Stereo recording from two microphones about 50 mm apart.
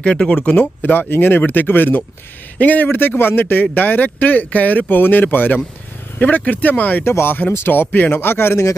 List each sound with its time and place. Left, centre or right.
0.0 s speech: centre
0.8 s speech: left
7.1 s speech: left